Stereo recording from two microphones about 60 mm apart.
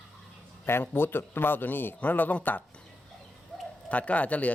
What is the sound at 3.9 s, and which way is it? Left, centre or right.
Speech, left.